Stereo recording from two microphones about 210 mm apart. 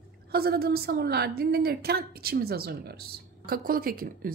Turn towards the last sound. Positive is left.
turn(degrees=-45)  # may be behind; listen again after turning